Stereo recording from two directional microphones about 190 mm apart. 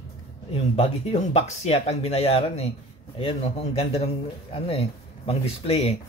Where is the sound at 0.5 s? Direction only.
30° left (ahead or behind).